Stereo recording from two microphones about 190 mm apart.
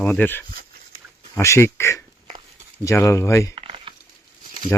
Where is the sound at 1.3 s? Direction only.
15° left (ahead or behind).